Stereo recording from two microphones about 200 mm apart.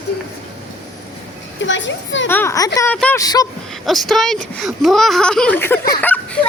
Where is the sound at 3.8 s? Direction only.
Centre (ahead or behind).